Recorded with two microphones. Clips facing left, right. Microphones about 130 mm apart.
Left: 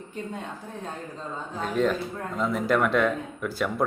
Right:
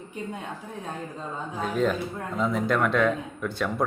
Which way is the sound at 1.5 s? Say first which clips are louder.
Even; centre (ahead or behind).